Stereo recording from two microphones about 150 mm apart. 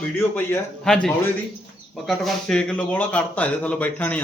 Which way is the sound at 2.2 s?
5° left (ahead or behind).